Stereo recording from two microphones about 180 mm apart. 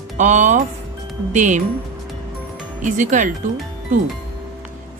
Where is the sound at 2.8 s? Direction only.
45° right (ahead or behind).